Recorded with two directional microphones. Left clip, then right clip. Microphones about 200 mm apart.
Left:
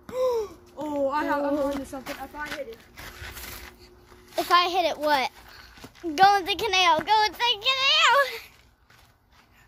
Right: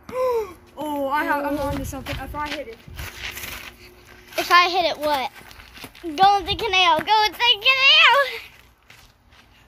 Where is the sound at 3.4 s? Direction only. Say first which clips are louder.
Right 7 dB; 15° left (ahead or behind).